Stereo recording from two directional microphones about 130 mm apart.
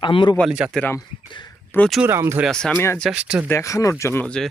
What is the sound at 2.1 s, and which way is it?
Speech, 20° right (ahead or behind).